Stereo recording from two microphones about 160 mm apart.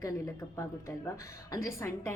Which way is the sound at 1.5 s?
15° left (ahead or behind).